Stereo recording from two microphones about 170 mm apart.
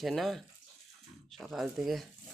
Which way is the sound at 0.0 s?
Centre (ahead or behind).